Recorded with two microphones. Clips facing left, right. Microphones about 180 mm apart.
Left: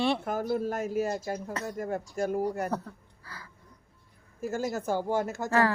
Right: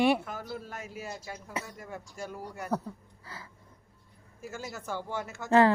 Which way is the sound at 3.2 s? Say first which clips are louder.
Right 1 dB; 20° right (ahead or behind).